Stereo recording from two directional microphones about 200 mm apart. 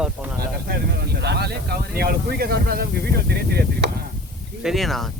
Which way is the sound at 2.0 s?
50° right (ahead or behind).